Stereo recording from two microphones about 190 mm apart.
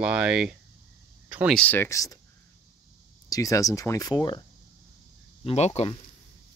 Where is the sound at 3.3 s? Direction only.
15° left (ahead or behind).